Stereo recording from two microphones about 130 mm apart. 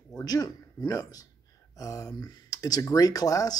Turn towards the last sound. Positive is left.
turn(degrees=30)  # may be behind; listen again after turning